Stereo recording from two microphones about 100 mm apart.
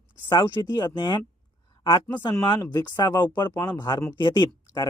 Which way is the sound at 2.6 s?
45° left (ahead or behind).